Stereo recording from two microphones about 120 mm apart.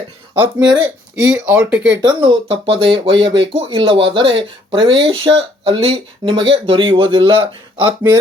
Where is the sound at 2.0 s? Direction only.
40° right (ahead or behind).